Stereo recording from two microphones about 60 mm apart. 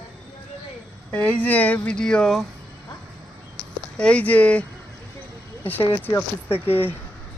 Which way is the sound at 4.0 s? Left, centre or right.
Centre.